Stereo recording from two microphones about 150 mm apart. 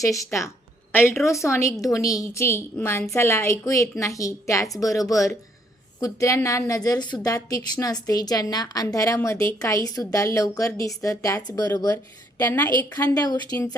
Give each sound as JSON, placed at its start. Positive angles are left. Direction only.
{"t": 0.0, "sound": "a woman's voice", "side_deg": 20}